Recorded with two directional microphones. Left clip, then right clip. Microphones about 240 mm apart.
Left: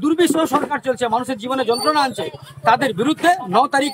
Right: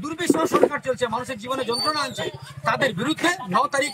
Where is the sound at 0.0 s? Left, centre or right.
Left.